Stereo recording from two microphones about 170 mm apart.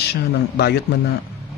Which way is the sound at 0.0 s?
70° left (ahead or behind).